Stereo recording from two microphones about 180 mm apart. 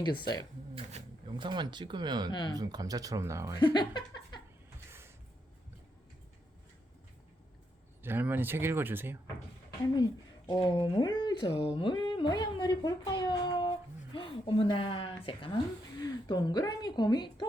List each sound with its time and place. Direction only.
0.0 s speech: 25° left (ahead or behind)
0.8 s a sound: 35° right (ahead or behind)
1.5 s speech: 25° right (ahead or behind)
2.3 s speech: 25° left (ahead or behind)
2.6 s speech: 20° right (ahead or behind)
3.6 s a sound: 25° left (ahead or behind)
4.9 s music: 15° right (ahead or behind)
8.0 s speech: 10° right (ahead or behind)
9.8 s a woman's voice: 20° left (ahead or behind)